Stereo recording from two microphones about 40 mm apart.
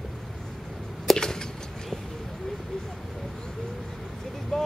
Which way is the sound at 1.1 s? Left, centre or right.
Centre.